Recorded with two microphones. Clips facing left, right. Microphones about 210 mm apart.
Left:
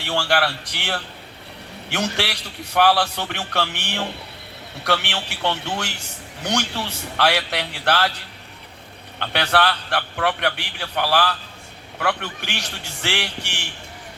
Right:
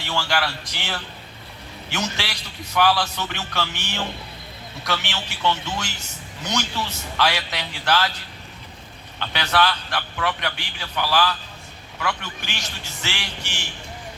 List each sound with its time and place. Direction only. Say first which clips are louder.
0.0 s a man's voice: left 3 dB; 65° left (ahead or behind)
9.1 s a man's voice: left 2 dB; 65° left (ahead or behind)